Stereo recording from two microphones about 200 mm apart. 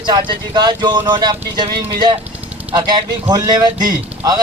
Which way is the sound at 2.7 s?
20° right (ahead or behind).